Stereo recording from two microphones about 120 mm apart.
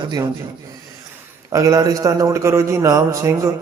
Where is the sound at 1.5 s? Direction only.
25° right (ahead or behind).